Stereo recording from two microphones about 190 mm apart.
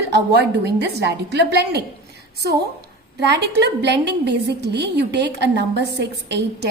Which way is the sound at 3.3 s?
60° right (ahead or behind).